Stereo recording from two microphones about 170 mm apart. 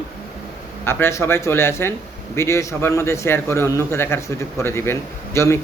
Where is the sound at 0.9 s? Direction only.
15° left (ahead or behind).